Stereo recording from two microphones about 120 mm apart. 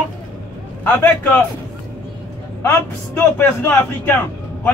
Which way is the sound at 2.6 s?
20° left (ahead or behind).